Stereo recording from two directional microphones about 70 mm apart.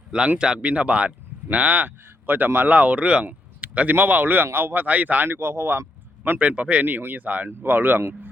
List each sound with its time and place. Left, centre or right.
0.3 s speech: centre; by 5.8 s right
6.4 s speech: centre